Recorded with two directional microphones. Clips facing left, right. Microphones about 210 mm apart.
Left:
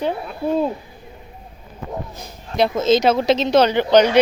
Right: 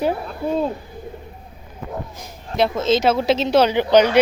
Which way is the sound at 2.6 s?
Centre (ahead or behind).